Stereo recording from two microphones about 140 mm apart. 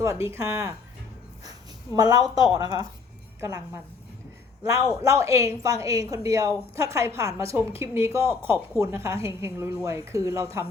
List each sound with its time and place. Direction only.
0.0 s a woman's voice: 20° right (ahead or behind)
4.6 s a woman's voice: 25° right (ahead or behind)